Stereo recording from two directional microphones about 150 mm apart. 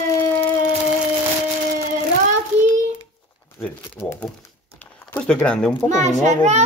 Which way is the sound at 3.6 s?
15° left (ahead or behind).